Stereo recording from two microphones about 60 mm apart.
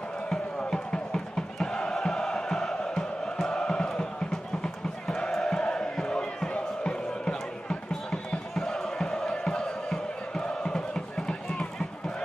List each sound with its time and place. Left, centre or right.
0.3 s music: centre